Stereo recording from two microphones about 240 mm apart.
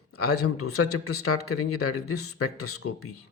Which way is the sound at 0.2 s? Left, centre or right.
Left.